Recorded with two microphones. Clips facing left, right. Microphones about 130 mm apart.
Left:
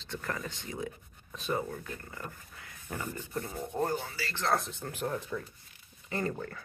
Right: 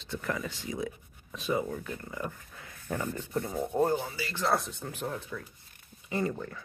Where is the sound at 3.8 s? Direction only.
20° right (ahead or behind).